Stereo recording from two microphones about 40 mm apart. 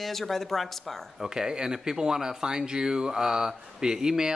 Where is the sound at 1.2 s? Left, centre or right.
Centre.